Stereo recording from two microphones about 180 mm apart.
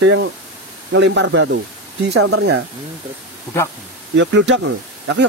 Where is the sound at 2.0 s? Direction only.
70° right (ahead or behind).